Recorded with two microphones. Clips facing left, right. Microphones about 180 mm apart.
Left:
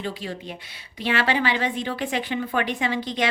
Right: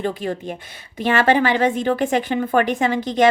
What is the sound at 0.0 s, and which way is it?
A woman's voice, 50° right (ahead or behind).